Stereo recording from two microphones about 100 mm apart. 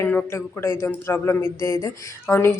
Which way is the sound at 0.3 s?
25° left (ahead or behind).